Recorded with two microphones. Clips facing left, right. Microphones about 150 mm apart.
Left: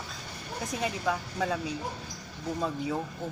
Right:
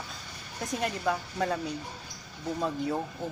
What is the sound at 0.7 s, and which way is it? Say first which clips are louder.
Speech: right 1 dB; centre (ahead or behind).